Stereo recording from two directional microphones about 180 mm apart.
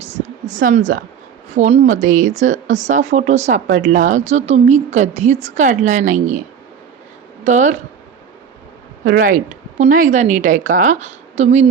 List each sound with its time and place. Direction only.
0.0 s speech: 40° right (ahead or behind)
1.5 s speech: 35° right (ahead or behind)
7.4 s speech: 40° right (ahead or behind)
9.0 s speech: 50° right (ahead or behind)